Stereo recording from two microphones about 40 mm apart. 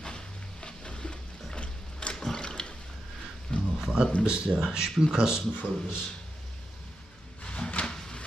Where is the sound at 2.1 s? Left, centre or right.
Centre.